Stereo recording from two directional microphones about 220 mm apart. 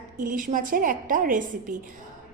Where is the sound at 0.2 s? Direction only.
35° right (ahead or behind).